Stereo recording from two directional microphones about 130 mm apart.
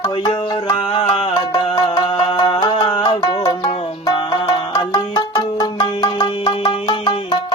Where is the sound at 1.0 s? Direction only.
50° left (ahead or behind).